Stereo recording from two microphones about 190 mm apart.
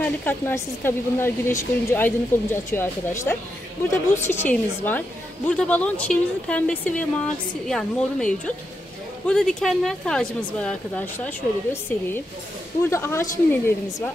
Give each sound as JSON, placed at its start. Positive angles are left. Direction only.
{"t": 0.0, "sound": "a woman's voice", "side_deg": 10}
{"t": 12.8, "sound": "a woman's voice", "side_deg": 15}